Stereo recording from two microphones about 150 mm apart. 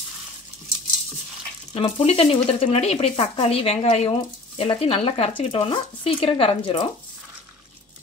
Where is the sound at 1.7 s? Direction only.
40° left (ahead or behind).